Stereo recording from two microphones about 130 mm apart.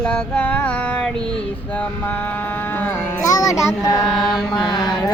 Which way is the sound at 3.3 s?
25° left (ahead or behind).